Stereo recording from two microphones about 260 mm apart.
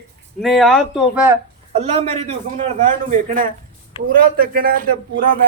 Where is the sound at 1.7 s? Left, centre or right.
Right.